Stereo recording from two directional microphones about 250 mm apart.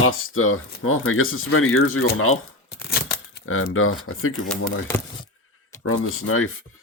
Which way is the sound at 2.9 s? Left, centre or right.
Left.